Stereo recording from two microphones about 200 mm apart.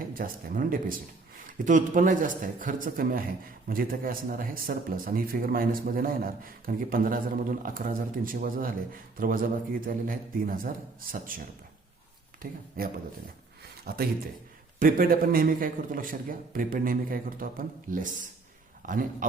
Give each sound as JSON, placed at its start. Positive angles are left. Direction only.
{"t": 0.0, "sound": "a man's voice", "side_deg": -45}
{"t": 13.6, "sound": "a sound", "side_deg": -50}
{"t": 14.8, "sound": "a man's voice", "side_deg": -45}